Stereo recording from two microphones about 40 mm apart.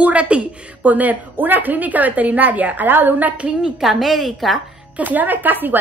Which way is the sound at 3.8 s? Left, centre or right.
Centre.